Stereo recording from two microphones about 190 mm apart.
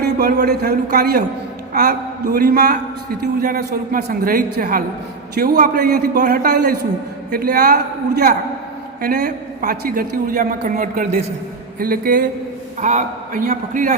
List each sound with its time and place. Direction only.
0.0 s a man's voice: 55° right (ahead or behind)